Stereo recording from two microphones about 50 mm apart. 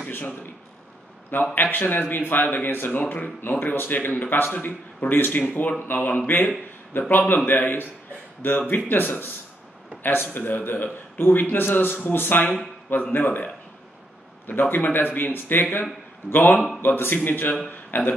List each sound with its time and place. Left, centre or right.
1.3 s speech: left
10.3 s speech: left
14.5 s a man's voice: left
16.5 s speech: centre
16.8 s a man's voice: left